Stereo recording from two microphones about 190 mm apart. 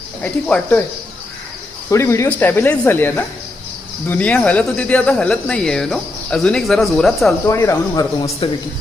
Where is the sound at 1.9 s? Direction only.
15° left (ahead or behind).